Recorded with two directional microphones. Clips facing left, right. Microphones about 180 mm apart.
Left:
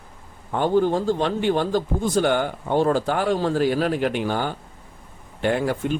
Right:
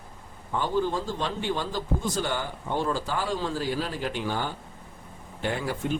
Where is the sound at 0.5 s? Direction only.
55° left (ahead or behind).